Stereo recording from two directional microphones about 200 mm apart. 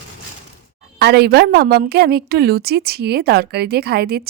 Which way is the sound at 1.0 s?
55° right (ahead or behind).